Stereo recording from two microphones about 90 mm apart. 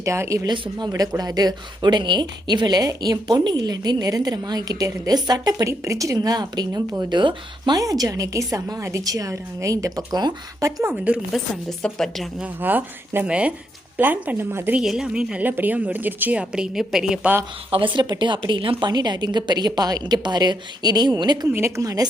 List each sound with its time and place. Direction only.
0.0 s a woman's voice: 35° right (ahead or behind)
0.4 s speech: 55° right (ahead or behind)
7.0 s speech: 60° right (ahead or behind)
7.8 s a woman's voice: 40° right (ahead or behind)
10.9 s a woman's voice: 10° right (ahead or behind)
11.8 s a woman's voice: 5° left (ahead or behind)
12.4 s a woman's voice: 20° right (ahead or behind)
14.8 s a woman's voice: 5° right (ahead or behind)
17.7 s speech: 70° right (ahead or behind)
18.9 s speech: 50° right (ahead or behind)
21.8 s a woman's voice: 40° right (ahead or behind)